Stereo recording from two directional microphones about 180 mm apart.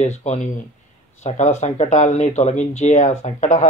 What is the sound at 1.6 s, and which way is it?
Speech, 40° left (ahead or behind).